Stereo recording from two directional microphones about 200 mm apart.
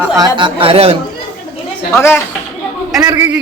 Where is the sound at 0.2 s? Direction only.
25° right (ahead or behind).